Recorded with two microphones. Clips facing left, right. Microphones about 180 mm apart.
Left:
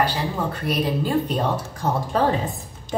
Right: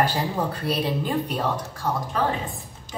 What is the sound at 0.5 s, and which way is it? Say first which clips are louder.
Speech: left 1 dB; 30° right (ahead or behind).